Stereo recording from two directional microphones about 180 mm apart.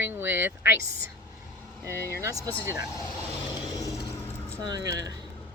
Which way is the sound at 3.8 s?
20° left (ahead or behind).